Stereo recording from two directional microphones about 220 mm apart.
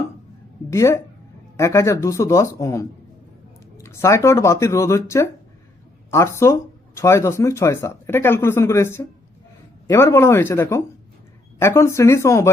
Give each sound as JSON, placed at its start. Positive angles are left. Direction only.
{"t": 0.7, "sound": "speech", "side_deg": 10}